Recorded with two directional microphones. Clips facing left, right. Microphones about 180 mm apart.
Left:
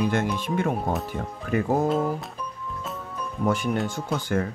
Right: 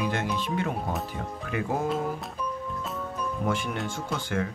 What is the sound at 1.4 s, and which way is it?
Music, 40° left (ahead or behind).